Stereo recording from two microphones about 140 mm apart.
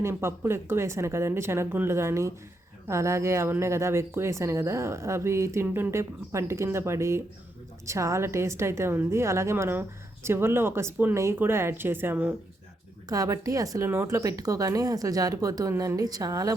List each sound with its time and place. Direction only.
0.0 s speech: 20° right (ahead or behind)
13.1 s speech: 25° right (ahead or behind)